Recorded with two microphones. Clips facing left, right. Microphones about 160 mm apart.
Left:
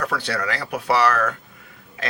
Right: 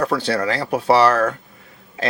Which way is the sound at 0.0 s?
30° right (ahead or behind).